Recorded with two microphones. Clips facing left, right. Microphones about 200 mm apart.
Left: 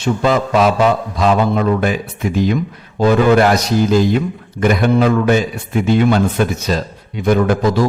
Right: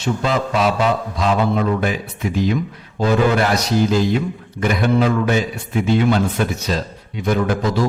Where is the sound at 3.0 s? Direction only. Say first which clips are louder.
Left 5 dB; 50° left (ahead or behind).